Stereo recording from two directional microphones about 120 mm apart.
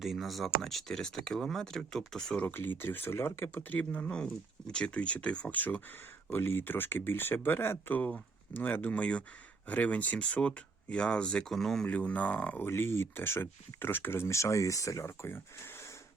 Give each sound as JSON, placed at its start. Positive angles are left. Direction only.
{"t": 0.0, "sound": "speech", "side_deg": 0}
{"t": 2.5, "sound": "speech", "side_deg": 20}